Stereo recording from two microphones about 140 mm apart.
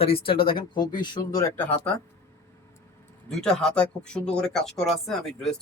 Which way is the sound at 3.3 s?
5° left (ahead or behind).